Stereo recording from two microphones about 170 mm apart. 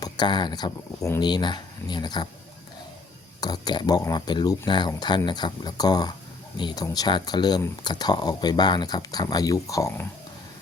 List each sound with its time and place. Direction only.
0.0 s speech: 25° left (ahead or behind)
3.4 s speech: 25° left (ahead or behind)